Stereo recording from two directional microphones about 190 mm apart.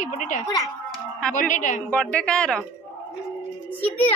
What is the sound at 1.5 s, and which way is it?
Speech, 40° left (ahead or behind).